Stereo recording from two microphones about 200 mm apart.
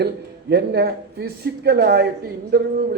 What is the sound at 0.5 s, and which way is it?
A man's voice, 55° right (ahead or behind).